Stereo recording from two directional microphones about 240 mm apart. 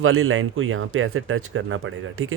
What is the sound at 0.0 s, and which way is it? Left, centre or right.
Speech, right.